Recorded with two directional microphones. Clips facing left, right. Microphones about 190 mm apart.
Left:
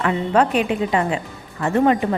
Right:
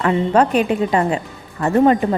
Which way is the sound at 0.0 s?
35° right (ahead or behind).